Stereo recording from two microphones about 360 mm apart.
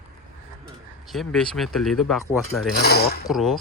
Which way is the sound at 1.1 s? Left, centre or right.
Centre.